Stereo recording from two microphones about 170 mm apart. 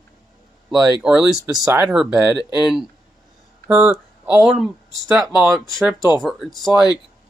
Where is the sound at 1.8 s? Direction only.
5° right (ahead or behind).